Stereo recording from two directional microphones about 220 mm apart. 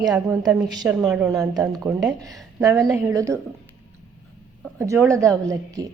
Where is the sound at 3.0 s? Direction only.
15° right (ahead or behind).